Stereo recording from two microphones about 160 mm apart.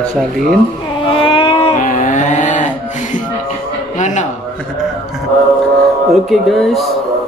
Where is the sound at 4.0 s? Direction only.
50° left (ahead or behind).